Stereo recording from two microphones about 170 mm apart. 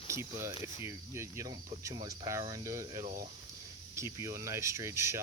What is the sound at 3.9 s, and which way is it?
Speech, 15° right (ahead or behind).